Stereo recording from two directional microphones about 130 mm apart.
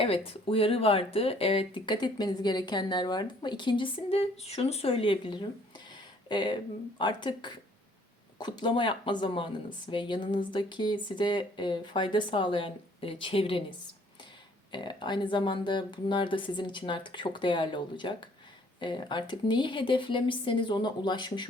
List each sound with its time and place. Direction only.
0.0 s speech: 45° left (ahead or behind)
5.9 s a sound: 35° left (ahead or behind)
7.0 s speech: 35° left (ahead or behind)